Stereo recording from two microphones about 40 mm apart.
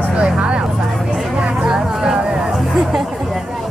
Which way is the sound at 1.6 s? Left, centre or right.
Centre.